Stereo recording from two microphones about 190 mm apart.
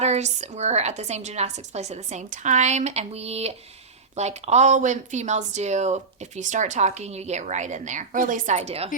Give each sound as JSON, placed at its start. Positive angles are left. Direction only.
{"t": 0.0, "sound": "speech", "side_deg": -35}